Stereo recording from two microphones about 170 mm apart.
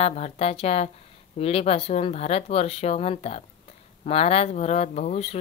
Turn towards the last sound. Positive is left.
turn(degrees=40)  # may be behind; listen again after turning